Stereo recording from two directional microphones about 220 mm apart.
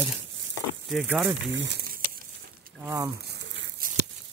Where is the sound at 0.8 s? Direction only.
5° right (ahead or behind).